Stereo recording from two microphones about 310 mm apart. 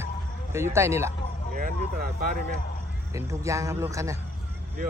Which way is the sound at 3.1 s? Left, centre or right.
Centre.